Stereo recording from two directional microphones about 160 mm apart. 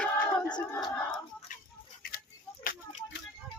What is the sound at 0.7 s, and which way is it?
Speech, 25° left (ahead or behind).